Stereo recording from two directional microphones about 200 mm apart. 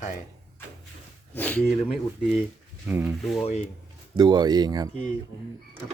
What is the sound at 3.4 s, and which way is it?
Speech, 30° left (ahead or behind).